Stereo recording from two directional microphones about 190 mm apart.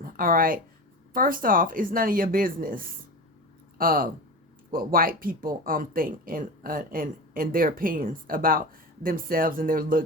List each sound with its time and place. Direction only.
0.0 s speech: 45° right (ahead or behind)